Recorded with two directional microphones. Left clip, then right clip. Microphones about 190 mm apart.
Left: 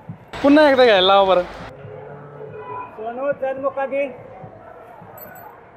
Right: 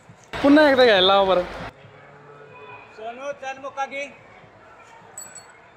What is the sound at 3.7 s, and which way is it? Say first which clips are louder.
Speech: left 7 dB; 10° left (ahead or behind).